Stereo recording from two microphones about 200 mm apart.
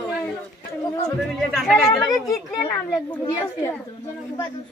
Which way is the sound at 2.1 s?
20° left (ahead or behind).